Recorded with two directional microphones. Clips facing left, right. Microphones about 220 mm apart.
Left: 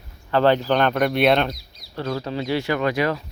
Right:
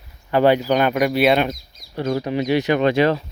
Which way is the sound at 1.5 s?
50° right (ahead or behind).